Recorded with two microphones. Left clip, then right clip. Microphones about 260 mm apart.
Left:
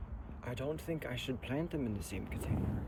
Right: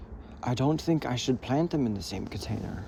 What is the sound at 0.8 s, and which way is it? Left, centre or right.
Speech, centre.